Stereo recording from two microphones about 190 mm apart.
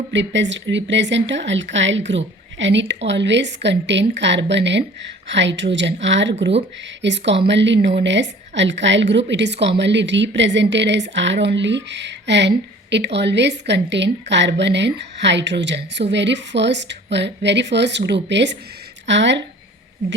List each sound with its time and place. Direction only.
0.1 s a woman's voice: 70° right (ahead or behind)